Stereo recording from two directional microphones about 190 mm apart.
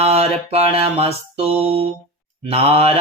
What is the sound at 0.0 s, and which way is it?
Mantra, 30° right (ahead or behind).